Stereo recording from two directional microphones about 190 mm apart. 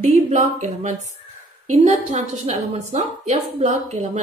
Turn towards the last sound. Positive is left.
turn(degrees=-35)  # may be behind; listen again after turning